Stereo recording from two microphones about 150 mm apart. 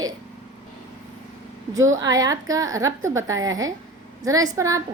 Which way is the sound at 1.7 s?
20° right (ahead or behind).